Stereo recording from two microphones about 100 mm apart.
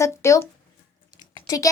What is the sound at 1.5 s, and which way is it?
Speech, 35° left (ahead or behind).